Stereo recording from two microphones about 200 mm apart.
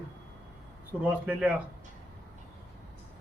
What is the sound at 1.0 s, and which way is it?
Speech, 5° right (ahead or behind).